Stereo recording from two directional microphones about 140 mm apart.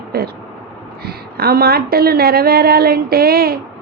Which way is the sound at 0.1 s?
90° right.